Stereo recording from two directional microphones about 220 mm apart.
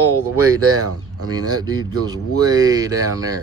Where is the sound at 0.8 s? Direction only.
90° right.